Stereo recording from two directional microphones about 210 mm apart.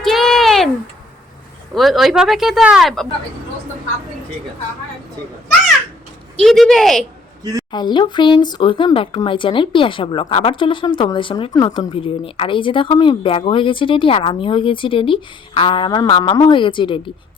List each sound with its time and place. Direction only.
0.0 s a sound: centre (ahead or behind)
1.7 s speech: centre (ahead or behind)
6.3 s speech: centre (ahead or behind)
7.7 s speech: 20° left (ahead or behind)